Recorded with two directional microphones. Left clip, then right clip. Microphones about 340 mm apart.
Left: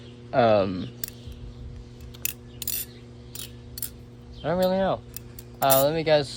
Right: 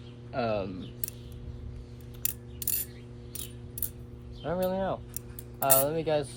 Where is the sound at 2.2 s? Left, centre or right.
Centre.